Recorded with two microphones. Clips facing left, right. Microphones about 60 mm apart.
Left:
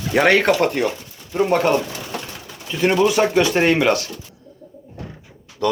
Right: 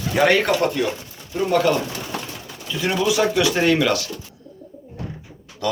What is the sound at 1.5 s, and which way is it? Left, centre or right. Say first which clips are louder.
Speech: right 1 dB; left.